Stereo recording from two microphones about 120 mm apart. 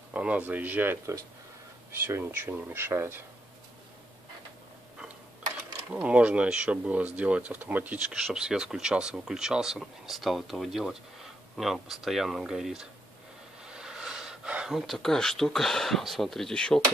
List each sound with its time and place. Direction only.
0.1 s speech: 10° right (ahead or behind)
6.0 s speech: 10° right (ahead or behind); by 16.8 s 5° left (ahead or behind)